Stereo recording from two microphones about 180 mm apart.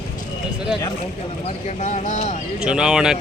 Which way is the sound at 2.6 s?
5° right (ahead or behind).